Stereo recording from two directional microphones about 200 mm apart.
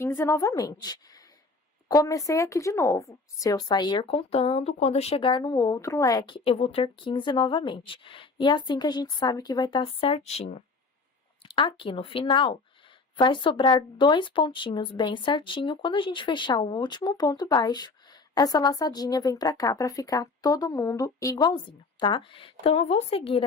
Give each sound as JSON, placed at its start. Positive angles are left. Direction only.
{"t": 0.0, "sound": "a woman's voice", "side_deg": 10}